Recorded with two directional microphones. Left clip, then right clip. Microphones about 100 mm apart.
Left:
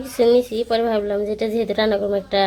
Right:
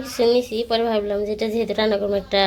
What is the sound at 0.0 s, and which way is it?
A woman's voice, 30° left (ahead or behind).